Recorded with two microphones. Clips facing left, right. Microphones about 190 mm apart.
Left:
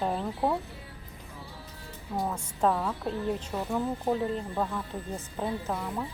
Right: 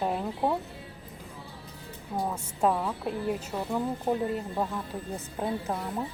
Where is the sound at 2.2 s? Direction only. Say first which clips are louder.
Even; 5° right (ahead or behind).